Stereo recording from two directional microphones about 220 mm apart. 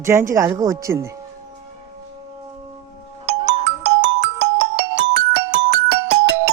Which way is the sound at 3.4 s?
55° right (ahead or behind).